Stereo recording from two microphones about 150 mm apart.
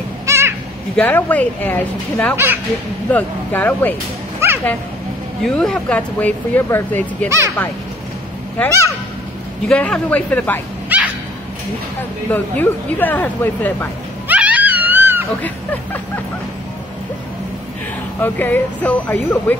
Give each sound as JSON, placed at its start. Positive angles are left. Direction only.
{"t": 0.3, "sound": "a sound", "side_deg": -15}
{"t": 0.9, "sound": "speech", "side_deg": 10}
{"t": 2.3, "sound": "speech", "side_deg": -15}
{"t": 3.1, "sound": "speech", "side_deg": 10}
{"t": 4.4, "sound": "a sound", "side_deg": -15}
{"t": 5.4, "sound": "speech", "side_deg": 5}
{"t": 7.2, "sound": "speech", "side_deg": -20}
{"t": 9.7, "sound": "speech", "side_deg": 5}
{"t": 10.9, "sound": "dog", "side_deg": -10}
{"t": 12.3, "sound": "speech", "side_deg": 10}
{"t": 14.2, "sound": "dog", "side_deg": -10}
{"t": 15.4, "sound": "speech", "side_deg": 10}
{"t": 18.2, "sound": "speech", "side_deg": 10}